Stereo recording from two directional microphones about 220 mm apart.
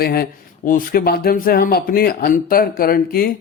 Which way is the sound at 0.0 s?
45° left (ahead or behind).